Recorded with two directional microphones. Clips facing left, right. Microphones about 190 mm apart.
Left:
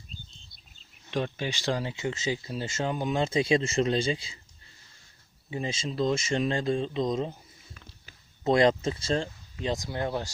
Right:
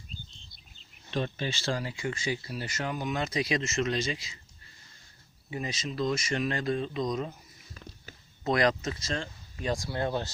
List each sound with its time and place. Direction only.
1.1 s speech: 15° left (ahead or behind); by 4.4 s 30° left (ahead or behind)
5.5 s speech: 25° left (ahead or behind)
8.4 s speech: 25° left (ahead or behind)